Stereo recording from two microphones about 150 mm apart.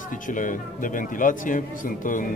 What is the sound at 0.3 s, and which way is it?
A man's voice, 60° left (ahead or behind).